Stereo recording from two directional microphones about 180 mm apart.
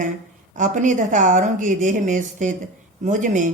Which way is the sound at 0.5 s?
45° right (ahead or behind).